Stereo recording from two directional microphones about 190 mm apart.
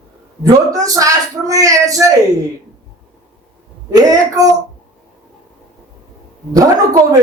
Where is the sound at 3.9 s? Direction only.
20° right (ahead or behind).